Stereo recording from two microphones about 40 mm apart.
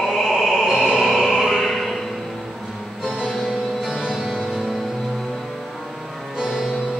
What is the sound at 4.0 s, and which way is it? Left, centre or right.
Music, centre.